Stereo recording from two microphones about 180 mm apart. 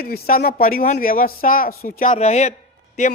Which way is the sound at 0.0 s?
55° left (ahead or behind).